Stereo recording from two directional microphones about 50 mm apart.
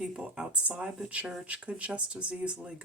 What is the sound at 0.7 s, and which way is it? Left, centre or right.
Speech, centre.